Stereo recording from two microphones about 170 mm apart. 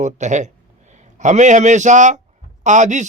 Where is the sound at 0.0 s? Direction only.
45° right (ahead or behind).